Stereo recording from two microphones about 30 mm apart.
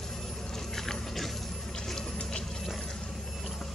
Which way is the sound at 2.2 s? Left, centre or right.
Left.